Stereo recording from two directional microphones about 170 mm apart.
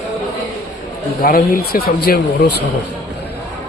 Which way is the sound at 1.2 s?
60° left (ahead or behind).